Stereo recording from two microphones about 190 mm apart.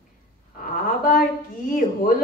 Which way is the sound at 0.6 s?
45° left (ahead or behind).